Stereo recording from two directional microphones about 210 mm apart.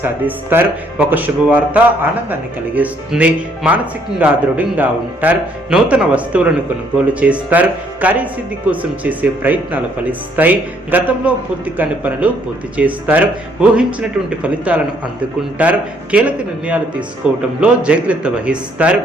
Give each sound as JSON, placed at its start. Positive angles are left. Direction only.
{"t": 0.0, "sound": "a man's voice", "side_deg": -10}